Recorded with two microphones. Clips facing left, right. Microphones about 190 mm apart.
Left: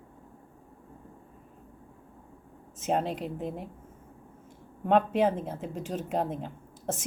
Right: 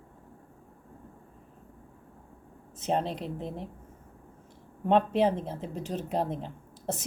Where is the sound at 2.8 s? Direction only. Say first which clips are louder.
Left 1 dB; 5° left (ahead or behind).